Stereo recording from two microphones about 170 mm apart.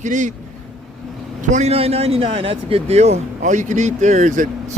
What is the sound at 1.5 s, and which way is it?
Speech, 40° right (ahead or behind).